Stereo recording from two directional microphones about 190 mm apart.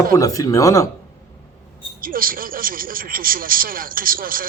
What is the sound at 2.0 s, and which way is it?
Speech, 50° right (ahead or behind).